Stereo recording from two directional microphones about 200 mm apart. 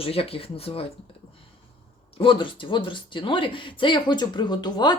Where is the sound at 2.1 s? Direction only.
25° left (ahead or behind).